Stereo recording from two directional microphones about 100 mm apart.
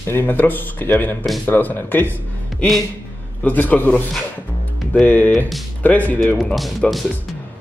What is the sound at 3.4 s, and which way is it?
Speech, 15° left (ahead or behind).